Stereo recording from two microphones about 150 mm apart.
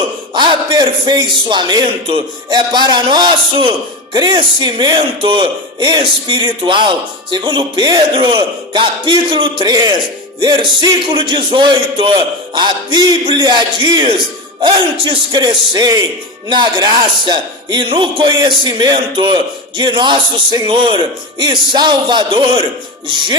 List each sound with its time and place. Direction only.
0.3 s a man's voice: 30° right (ahead or behind)